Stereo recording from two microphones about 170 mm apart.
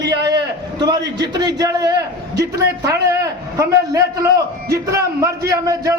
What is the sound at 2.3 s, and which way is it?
Speech, 75° right (ahead or behind).